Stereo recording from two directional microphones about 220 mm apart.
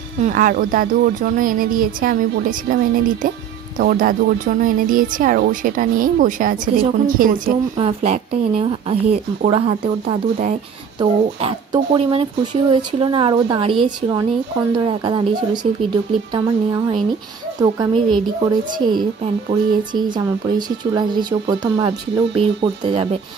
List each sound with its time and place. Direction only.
0.2 s speech: 40° right (ahead or behind)
7.7 s speech: 25° right (ahead or behind)
19.5 s speech: 20° right (ahead or behind)